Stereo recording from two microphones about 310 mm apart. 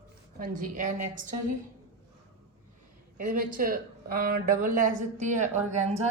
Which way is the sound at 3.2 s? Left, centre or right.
Right.